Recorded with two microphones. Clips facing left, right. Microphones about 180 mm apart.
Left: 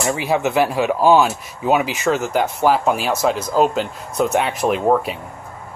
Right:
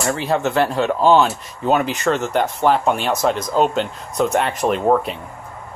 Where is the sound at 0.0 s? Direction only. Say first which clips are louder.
Left 1 dB; 10° left (ahead or behind).